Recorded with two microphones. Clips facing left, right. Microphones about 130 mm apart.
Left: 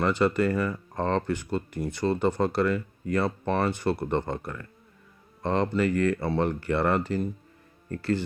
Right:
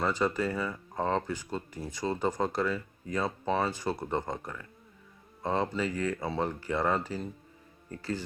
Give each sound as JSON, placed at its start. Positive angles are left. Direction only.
{"t": 0.0, "sound": "speech", "side_deg": 70}